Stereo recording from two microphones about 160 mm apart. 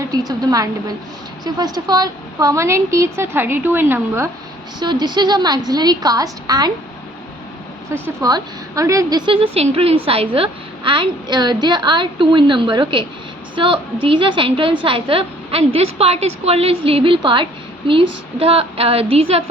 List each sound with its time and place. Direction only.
0.0 s a woman's voice: 25° right (ahead or behind)
4.8 s a woman's voice: 25° right (ahead or behind)
8.0 s a woman's voice: 20° right (ahead or behind); by 19.4 s 40° right (ahead or behind)